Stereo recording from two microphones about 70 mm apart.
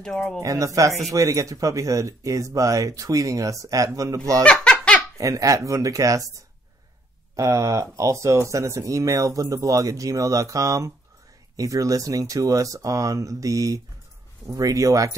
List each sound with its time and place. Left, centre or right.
0.0 s speech: centre
0.4 s speech: right
7.3 s speech: right